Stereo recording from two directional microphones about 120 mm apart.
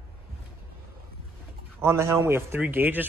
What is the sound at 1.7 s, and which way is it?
A man's voice, 20° right (ahead or behind).